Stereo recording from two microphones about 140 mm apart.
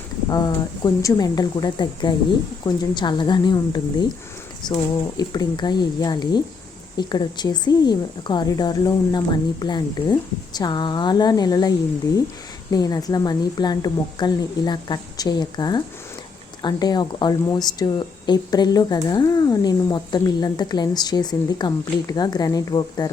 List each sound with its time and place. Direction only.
0.3 s a woman's voice: 30° left (ahead or behind)
12.7 s a woman's voice: 25° left (ahead or behind)